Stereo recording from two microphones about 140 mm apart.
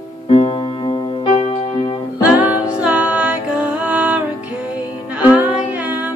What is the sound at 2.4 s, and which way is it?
Music, 10° right (ahead or behind).